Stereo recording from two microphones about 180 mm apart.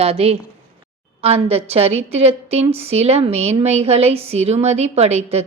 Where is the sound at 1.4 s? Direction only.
35° right (ahead or behind).